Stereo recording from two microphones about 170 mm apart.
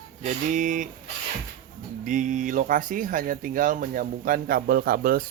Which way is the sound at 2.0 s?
45° right (ahead or behind).